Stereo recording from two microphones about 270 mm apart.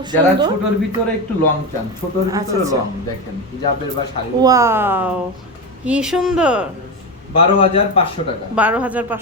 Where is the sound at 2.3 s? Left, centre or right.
Centre.